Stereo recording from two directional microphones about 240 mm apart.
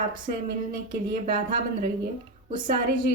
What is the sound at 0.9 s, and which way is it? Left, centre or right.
Speech, right.